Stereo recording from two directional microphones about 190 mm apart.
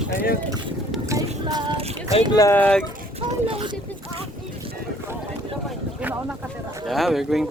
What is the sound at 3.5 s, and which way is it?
Speech, 30° right (ahead or behind).